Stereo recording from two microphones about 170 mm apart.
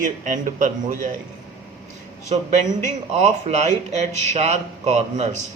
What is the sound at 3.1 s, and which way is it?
Speech, 40° right (ahead or behind).